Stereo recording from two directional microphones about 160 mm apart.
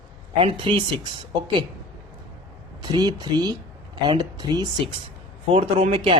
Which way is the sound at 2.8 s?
25° right (ahead or behind).